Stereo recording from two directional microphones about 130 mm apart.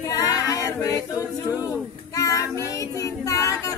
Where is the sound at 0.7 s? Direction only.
20° left (ahead or behind).